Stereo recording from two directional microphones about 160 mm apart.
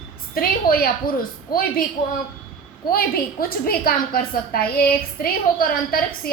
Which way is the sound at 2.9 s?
65° left (ahead or behind).